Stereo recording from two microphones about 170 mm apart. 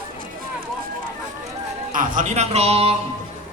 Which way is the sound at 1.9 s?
50° right (ahead or behind).